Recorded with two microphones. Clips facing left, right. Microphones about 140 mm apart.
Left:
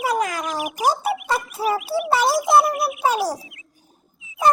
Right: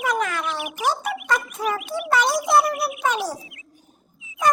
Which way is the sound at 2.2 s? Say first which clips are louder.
Left 2 dB; centre (ahead or behind).